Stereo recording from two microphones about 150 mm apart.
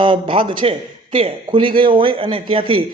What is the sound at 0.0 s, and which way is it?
A man's voice, 35° right (ahead or behind).